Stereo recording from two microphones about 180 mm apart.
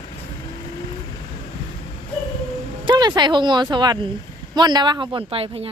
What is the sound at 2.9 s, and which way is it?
Speech, 25° right (ahead or behind).